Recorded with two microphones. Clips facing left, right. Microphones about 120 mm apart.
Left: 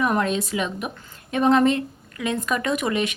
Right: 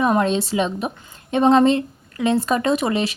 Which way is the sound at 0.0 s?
25° right (ahead or behind).